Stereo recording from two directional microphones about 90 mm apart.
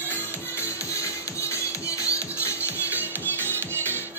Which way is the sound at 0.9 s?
35° left (ahead or behind).